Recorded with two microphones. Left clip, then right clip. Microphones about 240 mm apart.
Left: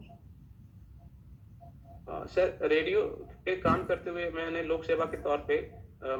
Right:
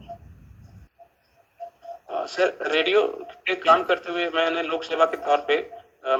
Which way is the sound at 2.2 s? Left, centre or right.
Right.